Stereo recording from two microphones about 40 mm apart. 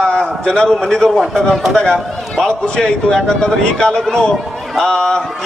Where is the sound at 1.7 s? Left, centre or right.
Centre.